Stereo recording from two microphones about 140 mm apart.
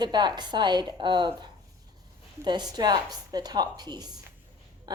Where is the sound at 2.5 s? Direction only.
30° right (ahead or behind).